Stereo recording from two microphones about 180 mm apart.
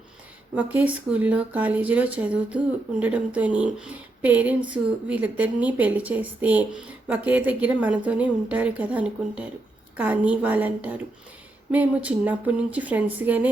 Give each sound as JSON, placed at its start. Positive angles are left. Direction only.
{"t": 0.5, "sound": "a woman's voice", "side_deg": -10}